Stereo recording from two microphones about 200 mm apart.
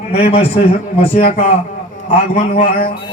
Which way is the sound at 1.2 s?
45° left (ahead or behind).